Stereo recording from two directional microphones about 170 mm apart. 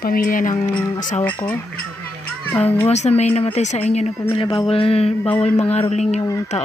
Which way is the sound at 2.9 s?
40° left (ahead or behind).